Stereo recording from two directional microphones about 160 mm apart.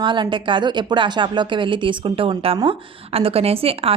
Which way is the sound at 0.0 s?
30° right (ahead or behind).